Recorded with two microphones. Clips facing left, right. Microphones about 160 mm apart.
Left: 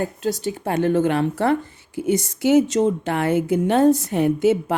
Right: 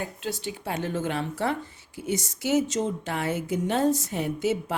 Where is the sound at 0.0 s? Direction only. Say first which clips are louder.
Left 9 dB; 40° left (ahead or behind).